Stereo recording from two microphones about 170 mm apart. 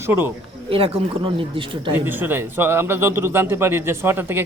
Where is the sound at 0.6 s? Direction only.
35° right (ahead or behind).